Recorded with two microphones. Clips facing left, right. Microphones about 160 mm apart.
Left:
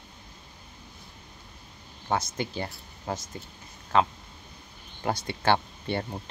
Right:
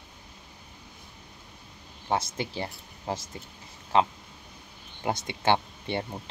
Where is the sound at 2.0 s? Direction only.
25° right (ahead or behind).